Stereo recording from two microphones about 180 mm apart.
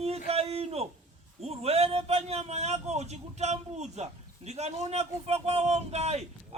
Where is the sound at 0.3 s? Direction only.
35° right (ahead or behind).